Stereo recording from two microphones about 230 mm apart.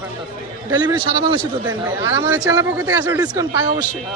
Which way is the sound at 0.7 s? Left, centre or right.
Centre.